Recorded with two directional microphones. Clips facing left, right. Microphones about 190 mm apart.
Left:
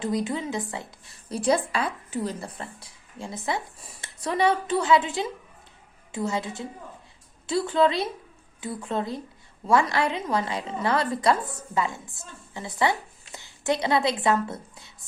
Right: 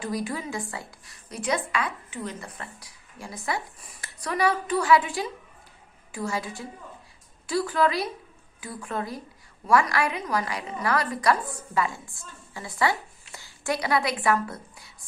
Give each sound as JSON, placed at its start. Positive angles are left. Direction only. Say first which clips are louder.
{"t": 0.0, "sound": "a woman's voice", "louder": "left 3 dB", "side_deg": 20}